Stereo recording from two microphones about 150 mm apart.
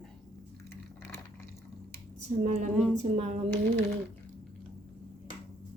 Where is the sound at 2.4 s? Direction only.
50° right (ahead or behind).